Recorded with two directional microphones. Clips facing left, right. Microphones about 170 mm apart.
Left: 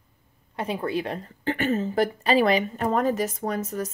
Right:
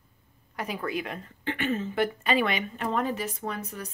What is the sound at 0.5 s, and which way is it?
A woman's voice, 30° left (ahead or behind).